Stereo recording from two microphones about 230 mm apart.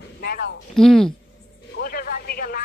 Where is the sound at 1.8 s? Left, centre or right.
Left.